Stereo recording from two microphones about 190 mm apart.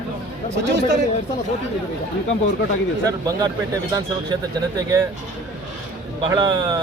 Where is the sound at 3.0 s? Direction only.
15° right (ahead or behind).